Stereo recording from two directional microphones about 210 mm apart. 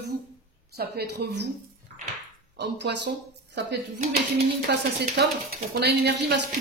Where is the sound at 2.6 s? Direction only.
55° right (ahead or behind).